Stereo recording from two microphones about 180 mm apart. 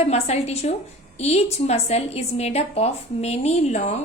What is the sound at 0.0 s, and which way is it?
A woman's voice, 35° left (ahead or behind).